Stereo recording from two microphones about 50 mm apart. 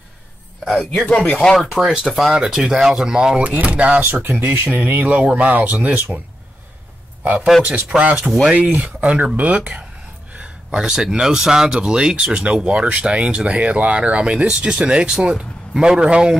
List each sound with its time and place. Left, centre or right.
0.7 s speech: centre
1.1 s speech: left
1.7 s speech: centre
3.4 s speech: right
4.0 s speech: right
7.6 s speech: right
8.3 s speech: centre
8.5 s speech: right
10.7 s speech: centre